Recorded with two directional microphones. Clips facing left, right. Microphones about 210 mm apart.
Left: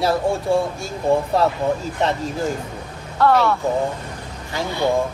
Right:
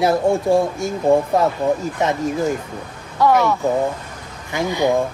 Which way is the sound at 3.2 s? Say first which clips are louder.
Right 1 dB; 15° right (ahead or behind).